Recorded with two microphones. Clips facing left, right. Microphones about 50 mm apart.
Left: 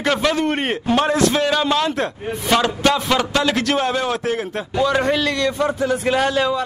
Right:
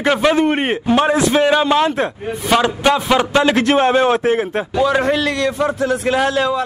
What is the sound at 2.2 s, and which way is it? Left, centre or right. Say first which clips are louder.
A man's voice: right 2 dB; centre.